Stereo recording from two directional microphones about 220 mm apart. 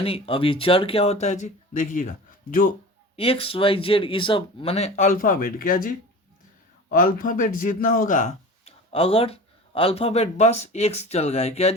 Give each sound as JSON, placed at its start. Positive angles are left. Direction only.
{"t": 0.0, "sound": "speech", "side_deg": 25}
{"t": 3.2, "sound": "speech", "side_deg": 25}